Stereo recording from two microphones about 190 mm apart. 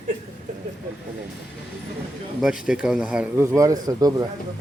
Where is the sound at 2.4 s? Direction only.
5° right (ahead or behind).